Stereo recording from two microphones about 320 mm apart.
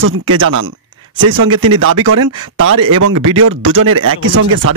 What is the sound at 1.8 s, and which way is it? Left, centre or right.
A man's voice, right.